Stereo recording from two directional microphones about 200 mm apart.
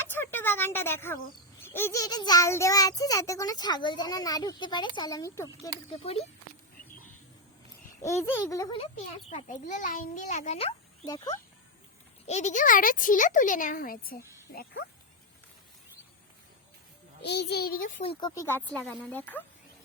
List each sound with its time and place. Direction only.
0.0 s a sound: 10° left (ahead or behind)
1.6 s a child's voice: 10° left (ahead or behind)
5.9 s speech: 30° left (ahead or behind)
8.0 s a child's voice: 15° left (ahead or behind)
8.8 s a child's voice: 35° left (ahead or behind)
12.3 s a child's voice: 35° left (ahead or behind)
17.2 s a child's voice: 55° left (ahead or behind)
18.0 s a child's voice: 25° left (ahead or behind); by 19.5 s 10° left (ahead or behind)